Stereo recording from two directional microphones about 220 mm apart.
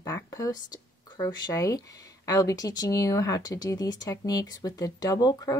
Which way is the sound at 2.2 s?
15° left (ahead or behind).